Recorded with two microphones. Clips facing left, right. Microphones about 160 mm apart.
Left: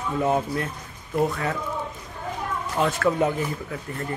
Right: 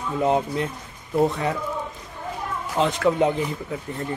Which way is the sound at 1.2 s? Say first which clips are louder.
Right 3 dB; 20° right (ahead or behind).